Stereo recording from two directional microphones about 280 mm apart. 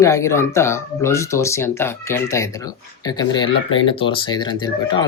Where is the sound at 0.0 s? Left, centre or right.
Centre.